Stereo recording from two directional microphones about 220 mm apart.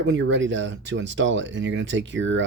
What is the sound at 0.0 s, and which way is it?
Speech, 55° right (ahead or behind).